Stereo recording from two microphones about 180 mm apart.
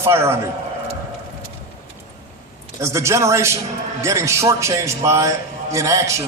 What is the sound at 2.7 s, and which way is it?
A man's voice, 15° right (ahead or behind).